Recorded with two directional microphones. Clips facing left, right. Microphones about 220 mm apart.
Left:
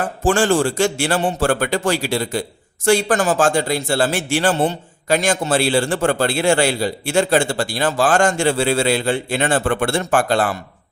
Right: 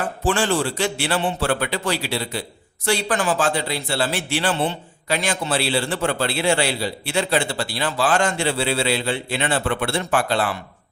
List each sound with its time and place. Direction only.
0.3 s a man's voice: 45° left (ahead or behind)